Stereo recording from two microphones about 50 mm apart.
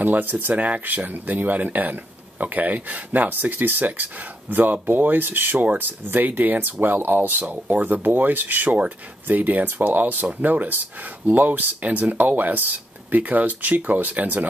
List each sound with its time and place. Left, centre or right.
0.0 s speech: right
8.6 s speech: right
9.3 s speech: right